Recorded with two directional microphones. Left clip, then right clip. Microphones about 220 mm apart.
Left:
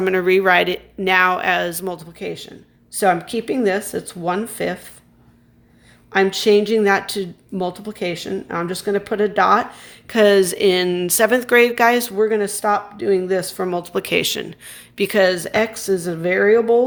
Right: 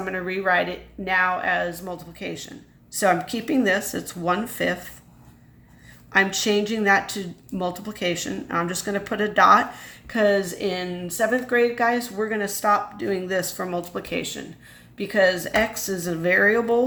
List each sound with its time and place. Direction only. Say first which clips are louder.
0.0 s speech: left 10 dB; 45° left (ahead or behind)
6.1 s speech: left 5 dB; 35° left (ahead or behind)